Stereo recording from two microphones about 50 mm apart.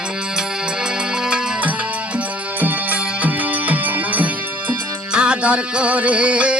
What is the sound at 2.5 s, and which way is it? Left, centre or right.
Music, right.